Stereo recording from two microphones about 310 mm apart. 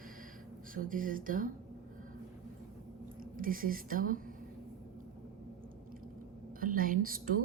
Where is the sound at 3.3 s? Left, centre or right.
Right.